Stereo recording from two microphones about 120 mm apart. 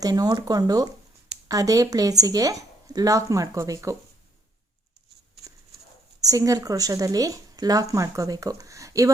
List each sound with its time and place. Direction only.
0.0 s a woman's voice: 35° right (ahead or behind)
6.2 s a woman's voice: 30° right (ahead or behind)